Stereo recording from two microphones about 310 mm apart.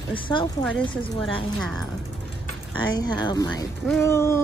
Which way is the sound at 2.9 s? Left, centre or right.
Centre.